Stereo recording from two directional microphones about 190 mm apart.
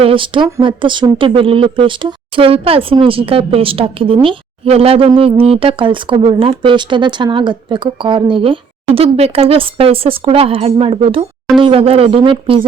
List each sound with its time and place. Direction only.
0.0 s speech: 25° right (ahead or behind)